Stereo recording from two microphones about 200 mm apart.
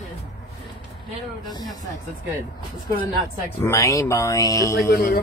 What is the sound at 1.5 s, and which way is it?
Speech, 20° left (ahead or behind).